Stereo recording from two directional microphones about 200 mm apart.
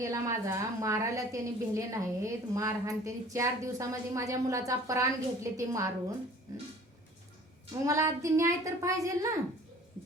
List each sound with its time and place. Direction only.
0.0 s a woman's voice: 15° right (ahead or behind)
7.9 s a woman's voice: 15° right (ahead or behind)